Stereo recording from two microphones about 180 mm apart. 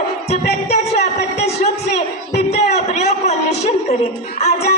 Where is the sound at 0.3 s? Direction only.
40° left (ahead or behind).